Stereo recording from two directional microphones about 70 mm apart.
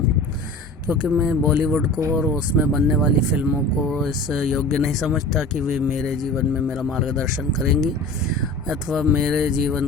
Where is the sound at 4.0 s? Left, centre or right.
Centre.